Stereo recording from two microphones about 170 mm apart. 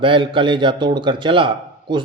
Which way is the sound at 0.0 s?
30° right (ahead or behind).